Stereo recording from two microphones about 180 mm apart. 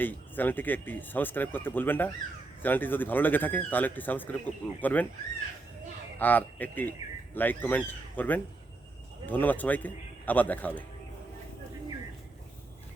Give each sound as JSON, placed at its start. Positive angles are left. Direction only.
{"t": 0.0, "sound": "speech", "side_deg": 10}
{"t": 6.1, "sound": "speech", "side_deg": 10}